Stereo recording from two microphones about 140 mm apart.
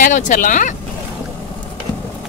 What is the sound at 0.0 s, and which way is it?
Speech, 65° left (ahead or behind).